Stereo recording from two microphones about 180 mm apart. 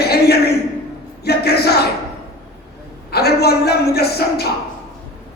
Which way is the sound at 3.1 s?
60° left (ahead or behind).